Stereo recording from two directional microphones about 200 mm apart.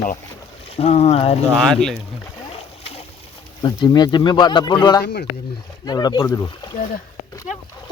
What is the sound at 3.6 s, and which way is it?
Speech, 20° left (ahead or behind).